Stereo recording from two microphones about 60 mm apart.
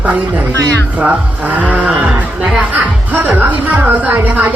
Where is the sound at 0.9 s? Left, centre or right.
Right.